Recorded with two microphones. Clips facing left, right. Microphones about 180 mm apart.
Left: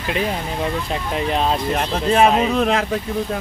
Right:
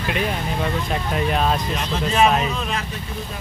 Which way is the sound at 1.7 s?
55° left (ahead or behind).